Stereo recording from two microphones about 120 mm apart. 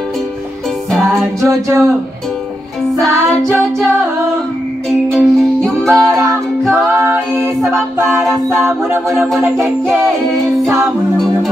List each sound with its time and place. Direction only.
0.9 s music: centre (ahead or behind)
1.5 s music: 25° right (ahead or behind)
3.1 s music: 25° right (ahead or behind)
5.1 s music: centre (ahead or behind)
6.7 s music: 25° right (ahead or behind)
7.6 s music: centre (ahead or behind)